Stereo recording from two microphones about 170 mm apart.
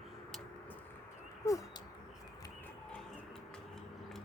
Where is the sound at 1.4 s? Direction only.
15° left (ahead or behind).